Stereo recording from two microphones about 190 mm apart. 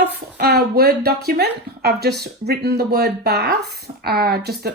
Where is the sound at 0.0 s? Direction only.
55° right (ahead or behind).